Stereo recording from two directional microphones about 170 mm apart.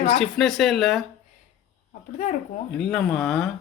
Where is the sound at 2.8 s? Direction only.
5° left (ahead or behind).